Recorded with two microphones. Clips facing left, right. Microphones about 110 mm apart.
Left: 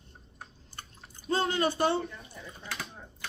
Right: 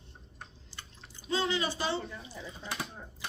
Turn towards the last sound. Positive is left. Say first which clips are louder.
# right 1 dB
turn(degrees=-15)  # may be behind; listen again after turning